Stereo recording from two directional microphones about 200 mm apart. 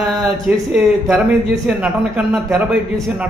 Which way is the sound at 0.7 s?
5° right (ahead or behind).